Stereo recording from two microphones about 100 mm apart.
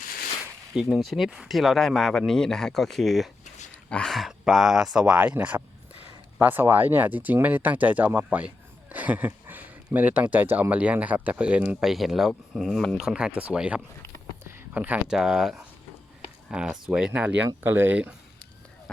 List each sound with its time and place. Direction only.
0.8 s speech: 5° right (ahead or behind)
11.8 s speech: 5° right (ahead or behind)
13.1 s speech: 10° right (ahead or behind)
14.4 s a sound: 20° right (ahead or behind)
15.0 s speech: 5° right (ahead or behind)